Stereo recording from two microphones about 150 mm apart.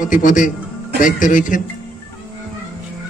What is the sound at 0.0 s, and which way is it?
A man's voice, 60° left (ahead or behind).